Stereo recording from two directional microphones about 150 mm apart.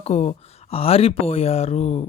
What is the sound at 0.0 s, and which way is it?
Speech, 45° left (ahead or behind).